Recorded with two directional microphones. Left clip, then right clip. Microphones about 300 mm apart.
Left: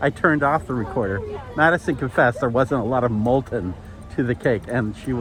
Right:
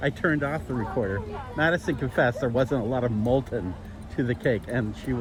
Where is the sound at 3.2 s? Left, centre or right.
Left.